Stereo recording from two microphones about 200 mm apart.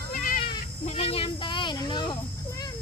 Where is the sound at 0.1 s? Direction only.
45° left (ahead or behind).